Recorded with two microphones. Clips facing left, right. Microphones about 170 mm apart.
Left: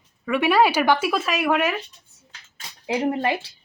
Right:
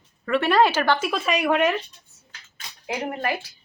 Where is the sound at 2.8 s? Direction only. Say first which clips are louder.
Left 5 dB; 25° left (ahead or behind).